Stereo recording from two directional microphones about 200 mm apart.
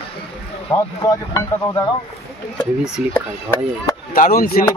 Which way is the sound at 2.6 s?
5° right (ahead or behind).